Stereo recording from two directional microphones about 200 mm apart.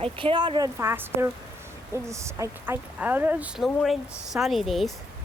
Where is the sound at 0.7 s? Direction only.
10° right (ahead or behind).